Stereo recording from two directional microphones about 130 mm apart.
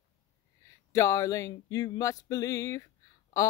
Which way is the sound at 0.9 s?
25° left (ahead or behind).